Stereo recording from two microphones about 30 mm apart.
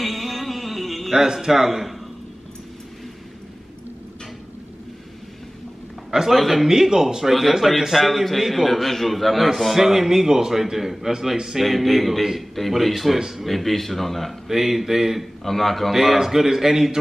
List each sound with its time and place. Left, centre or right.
0.0 s music: centre
1.1 s a man's voice: centre
6.3 s a man's voice: centre
6.7 s a man's voice: centre
7.8 s a man's voice: centre
9.8 s a man's voice: centre
11.6 s a man's voice: centre
14.5 s a man's voice: centre
15.4 s a man's voice: centre
15.9 s a man's voice: centre